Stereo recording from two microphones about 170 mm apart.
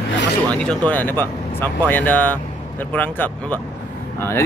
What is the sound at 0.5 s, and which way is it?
Speech, 5° left (ahead or behind).